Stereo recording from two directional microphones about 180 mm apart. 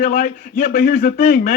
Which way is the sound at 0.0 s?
50° left (ahead or behind).